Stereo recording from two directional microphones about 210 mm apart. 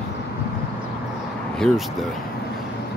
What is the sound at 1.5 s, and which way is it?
Speech, centre (ahead or behind).